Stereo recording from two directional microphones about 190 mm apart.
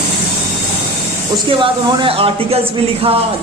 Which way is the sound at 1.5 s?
25° right (ahead or behind).